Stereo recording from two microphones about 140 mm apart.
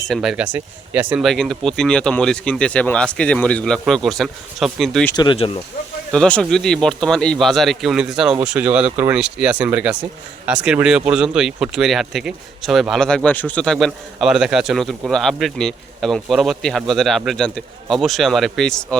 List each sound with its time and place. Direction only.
0.0 s speech: centre (ahead or behind)
1.2 s speech: centre (ahead or behind)
5.1 s speech: 35° left (ahead or behind)
6.1 s speech: 5° left (ahead or behind)